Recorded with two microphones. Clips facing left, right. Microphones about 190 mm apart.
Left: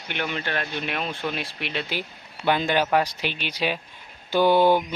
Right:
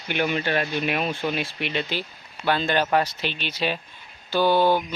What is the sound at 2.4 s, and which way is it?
Speech, 15° left (ahead or behind).